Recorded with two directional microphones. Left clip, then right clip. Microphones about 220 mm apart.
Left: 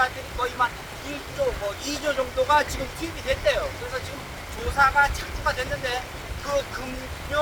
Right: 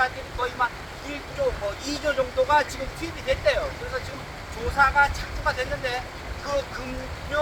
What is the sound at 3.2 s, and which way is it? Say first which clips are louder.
Speech: even; 10° left (ahead or behind).